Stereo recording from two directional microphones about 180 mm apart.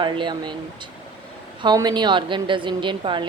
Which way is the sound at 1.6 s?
25° right (ahead or behind).